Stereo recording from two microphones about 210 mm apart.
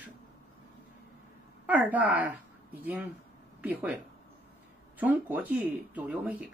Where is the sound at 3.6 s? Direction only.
10° right (ahead or behind).